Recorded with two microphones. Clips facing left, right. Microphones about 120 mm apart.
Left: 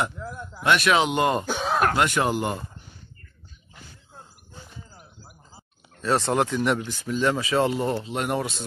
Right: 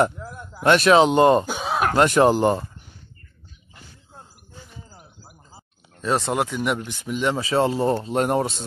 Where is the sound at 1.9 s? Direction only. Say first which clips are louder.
Right 6 dB; 35° right (ahead or behind).